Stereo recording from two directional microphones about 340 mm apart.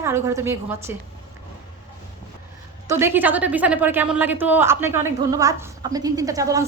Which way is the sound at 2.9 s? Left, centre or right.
Centre.